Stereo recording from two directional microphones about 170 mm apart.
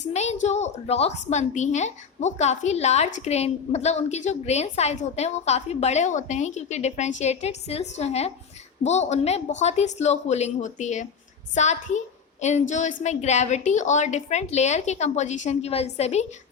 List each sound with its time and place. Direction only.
0.1 s a woman's voice: 40° left (ahead or behind)